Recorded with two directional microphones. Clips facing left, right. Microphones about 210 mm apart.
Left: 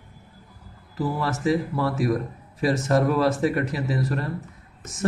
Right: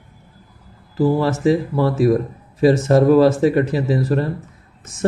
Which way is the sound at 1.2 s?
25° right (ahead or behind).